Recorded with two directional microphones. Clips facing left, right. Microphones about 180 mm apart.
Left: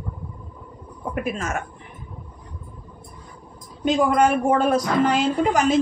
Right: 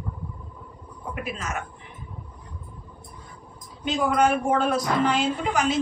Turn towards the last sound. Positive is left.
turn(degrees=45)  # may be behind; listen again after turning